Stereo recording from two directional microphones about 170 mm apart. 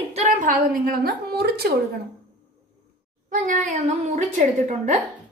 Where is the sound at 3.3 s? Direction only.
50° right (ahead or behind).